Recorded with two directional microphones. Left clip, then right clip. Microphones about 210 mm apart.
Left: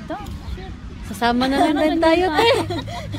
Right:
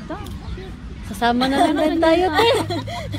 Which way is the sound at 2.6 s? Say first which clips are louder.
Even; 35° right (ahead or behind).